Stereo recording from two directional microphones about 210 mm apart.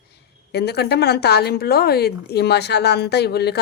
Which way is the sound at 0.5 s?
50° left (ahead or behind).